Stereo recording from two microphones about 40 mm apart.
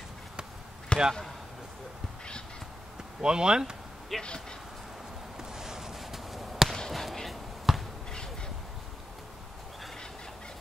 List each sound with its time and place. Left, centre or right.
0.9 s basketball bounce: left
3.2 s speech: centre
4.2 s a sound: left
5.4 s basketball bounce: centre